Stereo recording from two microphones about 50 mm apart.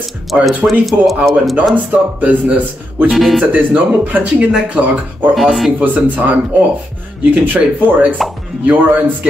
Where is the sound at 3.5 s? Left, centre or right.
Right.